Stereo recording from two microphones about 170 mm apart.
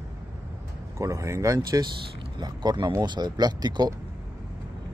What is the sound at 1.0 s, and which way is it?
Speech, 20° right (ahead or behind).